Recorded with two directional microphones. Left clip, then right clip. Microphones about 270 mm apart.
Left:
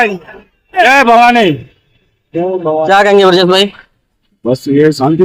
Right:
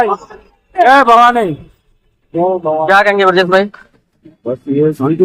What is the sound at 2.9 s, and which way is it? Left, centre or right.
Speech, left.